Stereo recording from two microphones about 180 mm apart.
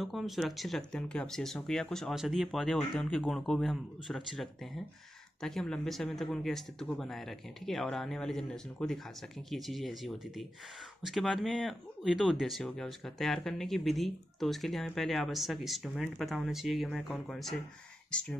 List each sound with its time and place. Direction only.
0.0 s speech: centre (ahead or behind)